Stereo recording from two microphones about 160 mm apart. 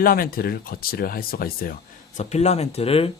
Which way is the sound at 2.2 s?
45° left (ahead or behind).